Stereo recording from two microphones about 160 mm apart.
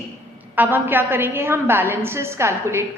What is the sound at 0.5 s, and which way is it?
A woman's voice, 10° right (ahead or behind).